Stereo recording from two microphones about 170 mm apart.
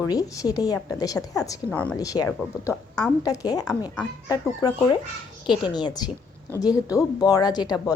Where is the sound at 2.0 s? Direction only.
20° left (ahead or behind).